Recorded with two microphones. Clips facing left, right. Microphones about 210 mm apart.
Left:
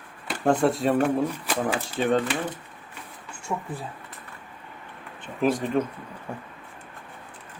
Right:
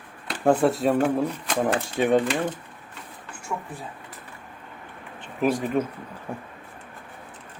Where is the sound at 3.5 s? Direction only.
25° left (ahead or behind).